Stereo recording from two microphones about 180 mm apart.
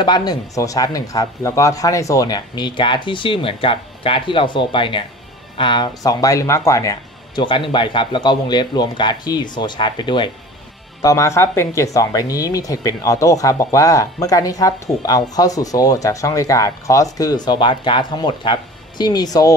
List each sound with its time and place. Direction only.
0.0 s speech: 25° left (ahead or behind)